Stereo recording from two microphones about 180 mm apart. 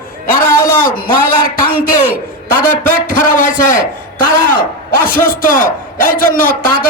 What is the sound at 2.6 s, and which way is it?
A man's voice, 50° left (ahead or behind).